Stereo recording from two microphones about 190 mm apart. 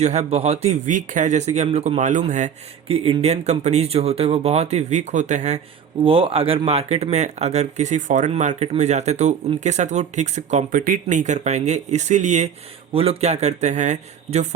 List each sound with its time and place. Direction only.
0.0 s speech: 35° right (ahead or behind)
6.0 s speech: 30° right (ahead or behind)